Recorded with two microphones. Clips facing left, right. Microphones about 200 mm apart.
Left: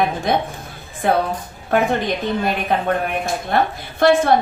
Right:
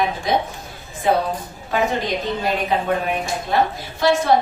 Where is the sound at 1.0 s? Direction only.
60° left (ahead or behind).